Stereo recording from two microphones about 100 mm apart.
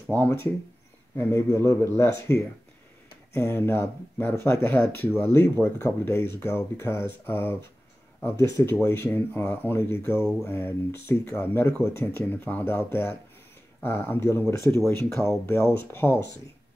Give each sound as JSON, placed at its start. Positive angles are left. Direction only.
{"t": 0.0, "sound": "speech", "side_deg": 20}
{"t": 8.8, "sound": "speech", "side_deg": 20}